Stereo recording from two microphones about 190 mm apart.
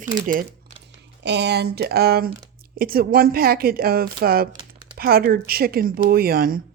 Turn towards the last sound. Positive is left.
turn(degrees=-50)  # may be behind; listen again after turning